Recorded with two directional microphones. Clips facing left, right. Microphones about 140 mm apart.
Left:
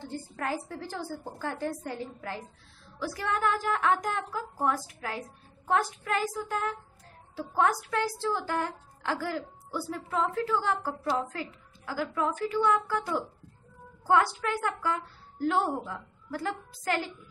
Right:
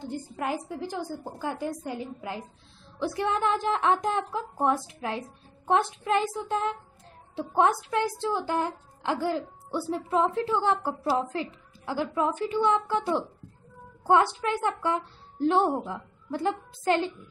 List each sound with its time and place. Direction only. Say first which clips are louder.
0.0 s a woman's voice: right 3 dB; 15° right (ahead or behind)